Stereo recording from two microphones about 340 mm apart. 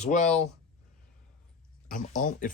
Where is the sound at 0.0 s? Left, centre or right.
Left.